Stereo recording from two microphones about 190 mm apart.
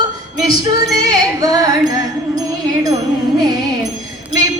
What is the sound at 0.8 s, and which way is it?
Music, 20° right (ahead or behind).